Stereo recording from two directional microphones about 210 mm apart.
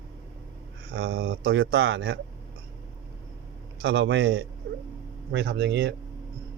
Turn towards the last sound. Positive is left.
turn(degrees=-55)  # may be behind; listen again after turning